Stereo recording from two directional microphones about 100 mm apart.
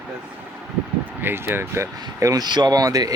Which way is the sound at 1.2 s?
20° right (ahead or behind).